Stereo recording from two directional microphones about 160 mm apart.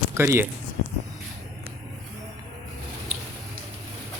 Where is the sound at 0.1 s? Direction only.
15° right (ahead or behind).